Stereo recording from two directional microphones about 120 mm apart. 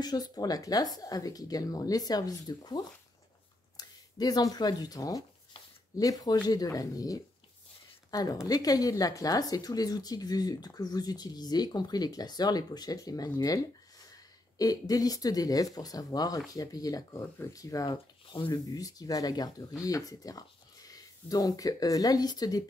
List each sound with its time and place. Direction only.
0.0 s speech: 35° left (ahead or behind)
14.6 s speech: 30° left (ahead or behind)